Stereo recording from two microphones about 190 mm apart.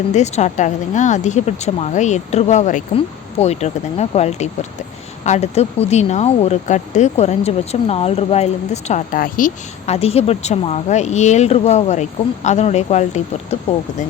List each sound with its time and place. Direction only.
0.1 s speech: 35° left (ahead or behind)